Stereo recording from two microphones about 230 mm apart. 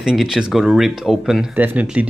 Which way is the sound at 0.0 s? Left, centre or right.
Centre.